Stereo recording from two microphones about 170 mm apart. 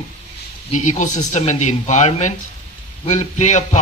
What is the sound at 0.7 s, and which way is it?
Speech, 45° left (ahead or behind).